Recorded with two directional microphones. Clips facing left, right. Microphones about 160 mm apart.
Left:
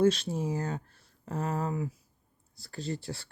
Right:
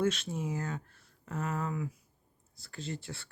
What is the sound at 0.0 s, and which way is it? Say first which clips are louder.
Speech: left 6 dB; 30° left (ahead or behind).